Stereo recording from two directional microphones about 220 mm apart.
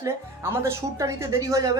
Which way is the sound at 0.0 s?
10° right (ahead or behind).